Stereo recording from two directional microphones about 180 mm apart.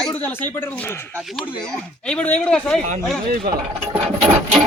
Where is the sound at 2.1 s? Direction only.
5° left (ahead or behind).